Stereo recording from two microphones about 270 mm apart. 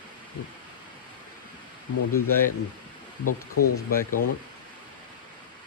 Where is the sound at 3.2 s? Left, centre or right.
Left.